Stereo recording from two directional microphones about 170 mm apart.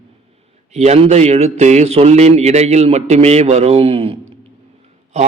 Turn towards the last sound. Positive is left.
turn(degrees=-40)  # may be behind; listen again after turning